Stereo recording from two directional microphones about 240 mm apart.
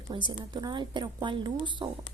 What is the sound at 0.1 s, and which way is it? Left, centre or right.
A woman's voice, centre.